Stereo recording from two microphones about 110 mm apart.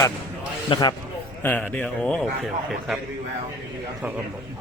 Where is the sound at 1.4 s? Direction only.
15° left (ahead or behind).